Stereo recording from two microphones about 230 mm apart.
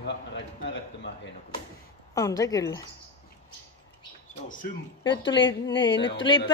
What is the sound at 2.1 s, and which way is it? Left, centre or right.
Speech, centre.